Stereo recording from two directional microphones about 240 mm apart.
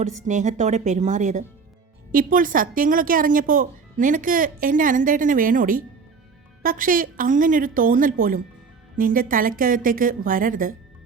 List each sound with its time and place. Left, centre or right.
0.3 s speech: right